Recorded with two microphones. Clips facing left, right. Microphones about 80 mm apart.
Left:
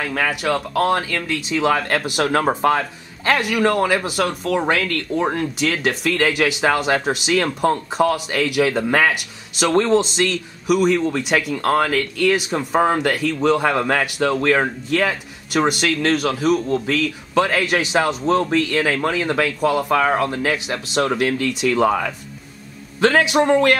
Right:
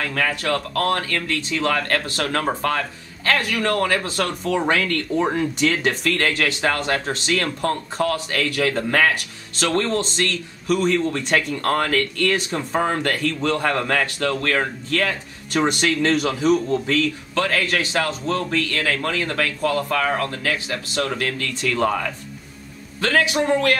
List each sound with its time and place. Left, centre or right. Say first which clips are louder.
0.0 s speech: left 2 dB; centre
17.3 s speech: left 7 dB; centre
22.9 s a man's voice: left 4 dB; left